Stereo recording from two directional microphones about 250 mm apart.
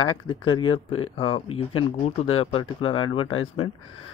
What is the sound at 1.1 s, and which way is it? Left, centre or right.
Speech, left.